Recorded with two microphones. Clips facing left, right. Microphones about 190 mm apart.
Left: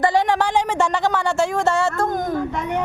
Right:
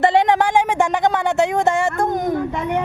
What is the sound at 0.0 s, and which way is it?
Speech, 25° right (ahead or behind).